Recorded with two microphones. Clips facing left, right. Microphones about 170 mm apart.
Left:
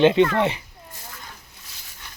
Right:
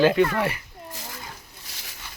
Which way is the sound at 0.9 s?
90° right.